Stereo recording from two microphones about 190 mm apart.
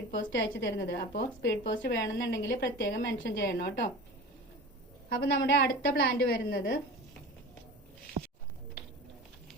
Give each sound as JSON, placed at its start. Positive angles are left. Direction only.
{"t": 0.3, "sound": "a woman's voice", "side_deg": 70}
{"t": 5.0, "sound": "a woman's voice", "side_deg": 60}